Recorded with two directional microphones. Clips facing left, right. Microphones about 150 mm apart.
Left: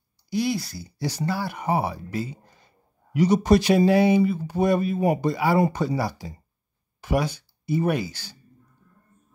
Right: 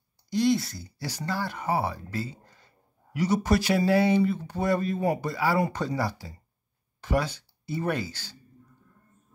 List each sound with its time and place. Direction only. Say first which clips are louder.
0.3 s speech: right 1 dB; 10° left (ahead or behind)
0.8 s speech: left 6 dB; 15° left (ahead or behind)